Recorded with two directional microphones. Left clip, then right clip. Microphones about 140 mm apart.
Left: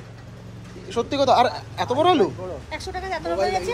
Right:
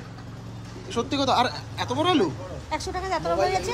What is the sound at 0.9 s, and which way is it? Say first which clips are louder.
Speech: left 5 dB; 15° right (ahead or behind).